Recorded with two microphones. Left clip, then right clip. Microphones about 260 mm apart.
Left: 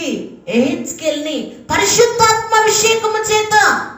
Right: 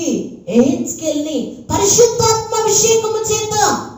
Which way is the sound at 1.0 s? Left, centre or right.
Left.